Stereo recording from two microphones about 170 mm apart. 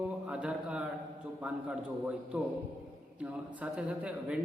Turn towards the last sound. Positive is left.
turn(degrees=-5)  # may be behind; listen again after turning